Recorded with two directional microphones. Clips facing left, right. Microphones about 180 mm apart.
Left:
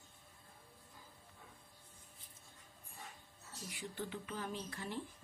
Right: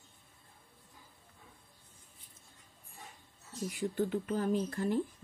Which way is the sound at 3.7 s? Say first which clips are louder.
Right 12 dB; 45° right (ahead or behind).